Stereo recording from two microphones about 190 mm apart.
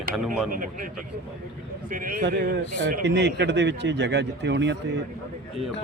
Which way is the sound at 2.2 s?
55° right (ahead or behind).